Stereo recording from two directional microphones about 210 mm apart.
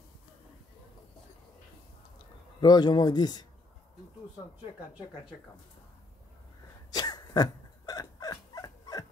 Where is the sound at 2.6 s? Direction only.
20° left (ahead or behind).